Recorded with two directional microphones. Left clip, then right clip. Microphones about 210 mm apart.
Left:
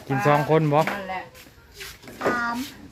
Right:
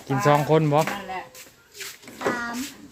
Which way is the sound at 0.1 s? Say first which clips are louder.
Even; 10° right (ahead or behind).